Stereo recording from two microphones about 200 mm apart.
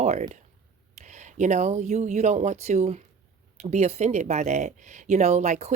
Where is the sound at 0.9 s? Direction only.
35° right (ahead or behind).